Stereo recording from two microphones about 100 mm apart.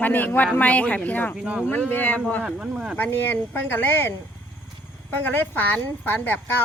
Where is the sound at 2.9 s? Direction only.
20° left (ahead or behind).